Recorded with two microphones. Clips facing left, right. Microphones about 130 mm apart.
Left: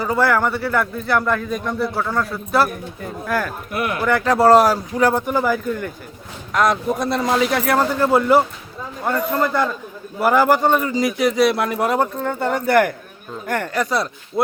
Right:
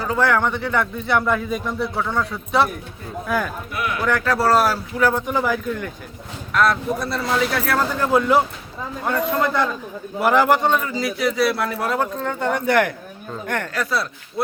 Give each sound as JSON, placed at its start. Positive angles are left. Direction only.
{"t": 0.0, "sound": "a man's voice", "side_deg": 10}
{"t": 3.7, "sound": "speech", "side_deg": 50}
{"t": 4.2, "sound": "a man's voice", "side_deg": 20}
{"t": 6.5, "sound": "a man's voice", "side_deg": 15}